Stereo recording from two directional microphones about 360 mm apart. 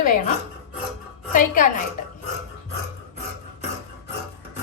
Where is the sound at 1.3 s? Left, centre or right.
Left.